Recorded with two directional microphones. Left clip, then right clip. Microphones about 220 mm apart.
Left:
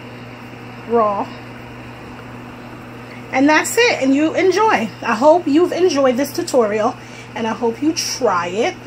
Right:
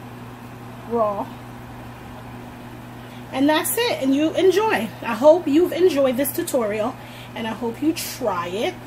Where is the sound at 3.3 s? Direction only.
5° left (ahead or behind).